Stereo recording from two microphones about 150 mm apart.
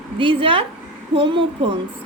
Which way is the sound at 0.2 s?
35° right (ahead or behind).